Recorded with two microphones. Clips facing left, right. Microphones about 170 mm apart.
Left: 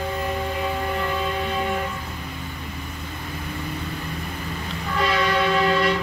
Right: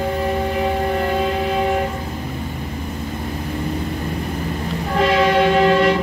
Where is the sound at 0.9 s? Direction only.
50° right (ahead or behind).